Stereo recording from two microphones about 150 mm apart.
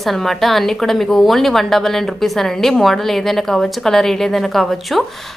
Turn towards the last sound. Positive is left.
turn(degrees=0)  # may be behind; listen again after turning